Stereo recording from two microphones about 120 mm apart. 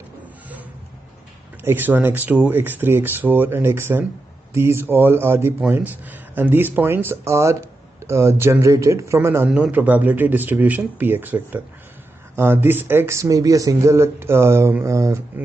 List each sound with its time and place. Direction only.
1.6 s a man's voice: 20° right (ahead or behind)
15.3 s a man's voice: 15° right (ahead or behind)